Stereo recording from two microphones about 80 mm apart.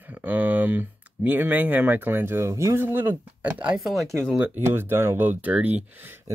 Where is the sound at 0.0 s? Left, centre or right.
Right.